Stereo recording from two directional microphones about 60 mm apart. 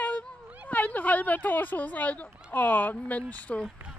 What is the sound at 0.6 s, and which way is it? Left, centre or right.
Speech, left.